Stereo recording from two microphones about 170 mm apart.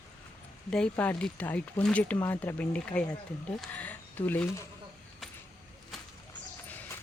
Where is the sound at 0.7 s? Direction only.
5° left (ahead or behind).